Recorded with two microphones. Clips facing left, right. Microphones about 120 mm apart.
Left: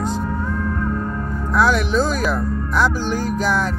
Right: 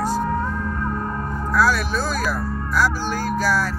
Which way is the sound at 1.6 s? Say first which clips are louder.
Left 3 dB; 20° left (ahead or behind).